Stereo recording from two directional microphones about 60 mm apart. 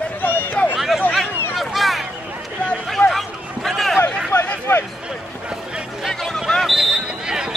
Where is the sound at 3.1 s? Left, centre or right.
Centre.